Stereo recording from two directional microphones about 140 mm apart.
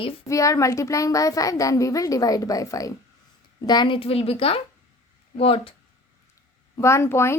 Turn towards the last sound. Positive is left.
turn(degrees=20)  # may be behind; listen again after turning